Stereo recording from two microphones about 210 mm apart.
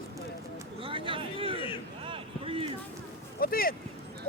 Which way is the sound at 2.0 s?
25° right (ahead or behind).